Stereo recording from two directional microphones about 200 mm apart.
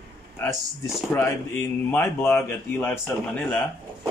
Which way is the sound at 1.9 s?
10° left (ahead or behind).